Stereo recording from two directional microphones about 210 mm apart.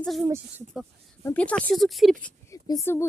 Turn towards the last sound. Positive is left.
turn(degrees=10)  # may be behind; listen again after turning